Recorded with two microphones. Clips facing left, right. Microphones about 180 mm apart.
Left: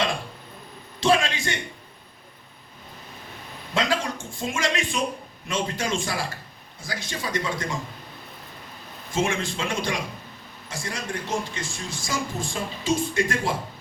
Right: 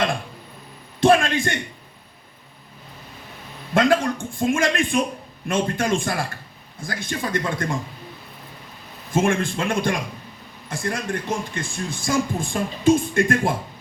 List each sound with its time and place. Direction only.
0.9 s a man's voice: 55° right (ahead or behind)
3.8 s a man's voice: 55° right (ahead or behind)
9.1 s a man's voice: 55° right (ahead or behind)